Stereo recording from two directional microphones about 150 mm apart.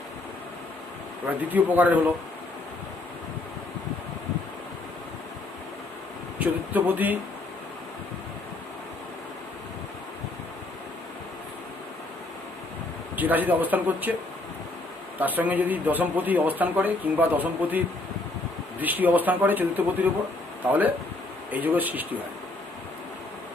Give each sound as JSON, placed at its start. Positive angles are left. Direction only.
{"t": 1.3, "sound": "speech", "side_deg": -10}
{"t": 6.4, "sound": "speech", "side_deg": -10}
{"t": 13.1, "sound": "speech", "side_deg": -10}
{"t": 15.2, "sound": "speech", "side_deg": -10}